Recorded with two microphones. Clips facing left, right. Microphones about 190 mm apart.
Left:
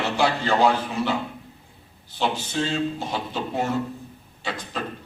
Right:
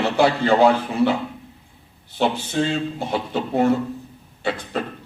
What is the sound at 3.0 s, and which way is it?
A man's voice, 60° right (ahead or behind).